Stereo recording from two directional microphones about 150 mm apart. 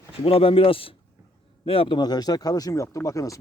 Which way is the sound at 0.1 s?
40° left (ahead or behind).